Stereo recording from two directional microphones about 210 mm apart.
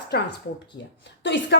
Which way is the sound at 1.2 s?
60° left (ahead or behind).